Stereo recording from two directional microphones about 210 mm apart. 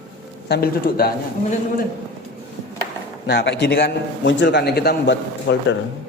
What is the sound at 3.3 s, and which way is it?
A man's voice, 55° left (ahead or behind).